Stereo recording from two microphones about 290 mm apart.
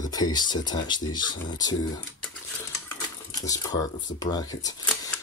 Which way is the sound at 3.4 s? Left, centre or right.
Centre.